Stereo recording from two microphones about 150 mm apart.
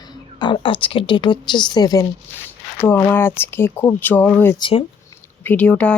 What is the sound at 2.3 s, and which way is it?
Speech, 15° left (ahead or behind).